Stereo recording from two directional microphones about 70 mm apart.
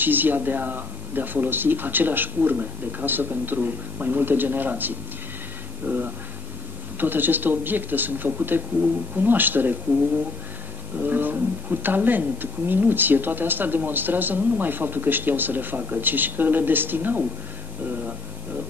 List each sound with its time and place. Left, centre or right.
0.0 s speech: right
11.0 s speech: right